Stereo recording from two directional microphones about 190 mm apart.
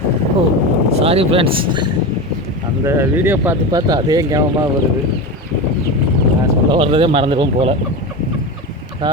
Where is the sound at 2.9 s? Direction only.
15° right (ahead or behind).